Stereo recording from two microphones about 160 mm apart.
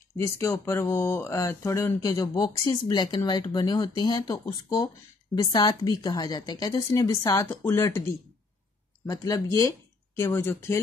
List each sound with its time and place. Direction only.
0.2 s speech: 15° left (ahead or behind)